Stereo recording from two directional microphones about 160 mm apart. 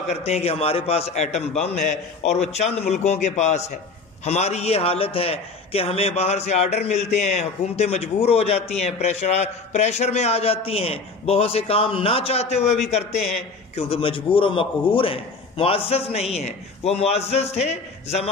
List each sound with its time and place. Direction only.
0.1 s a man's voice: 40° left (ahead or behind)